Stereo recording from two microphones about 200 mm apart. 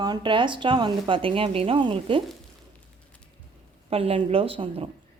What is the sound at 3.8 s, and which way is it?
Speech, 30° right (ahead or behind).